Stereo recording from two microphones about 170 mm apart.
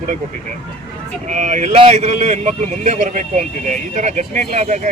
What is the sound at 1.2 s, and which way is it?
A man's voice, 45° right (ahead or behind).